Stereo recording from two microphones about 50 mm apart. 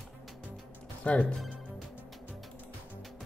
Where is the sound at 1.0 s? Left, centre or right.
Left.